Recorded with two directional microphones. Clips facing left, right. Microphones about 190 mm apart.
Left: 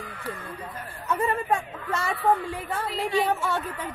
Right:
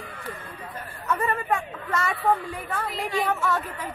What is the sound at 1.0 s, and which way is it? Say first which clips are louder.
A woman's voice: left 1 dB; 25° left (ahead or behind).